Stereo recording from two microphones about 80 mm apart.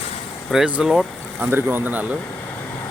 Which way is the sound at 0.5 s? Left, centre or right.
Centre.